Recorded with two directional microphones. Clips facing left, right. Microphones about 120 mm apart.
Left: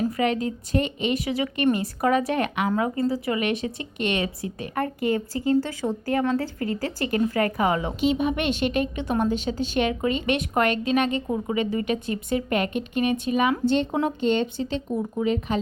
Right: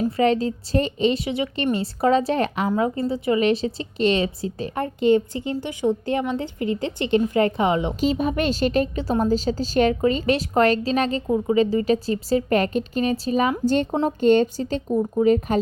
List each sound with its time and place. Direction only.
0.2 s a woman's voice: 30° right (ahead or behind)
8.0 s a woman's voice: 40° right (ahead or behind)